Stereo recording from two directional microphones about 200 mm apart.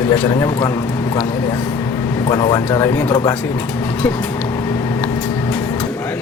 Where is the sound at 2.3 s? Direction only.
20° left (ahead or behind).